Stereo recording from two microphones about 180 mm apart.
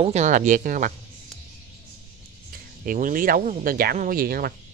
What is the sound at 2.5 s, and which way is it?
Speech, 50° right (ahead or behind).